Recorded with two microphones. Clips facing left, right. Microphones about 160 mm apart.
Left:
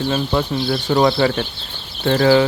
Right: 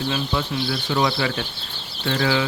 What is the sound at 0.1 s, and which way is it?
Speech, 45° left (ahead or behind).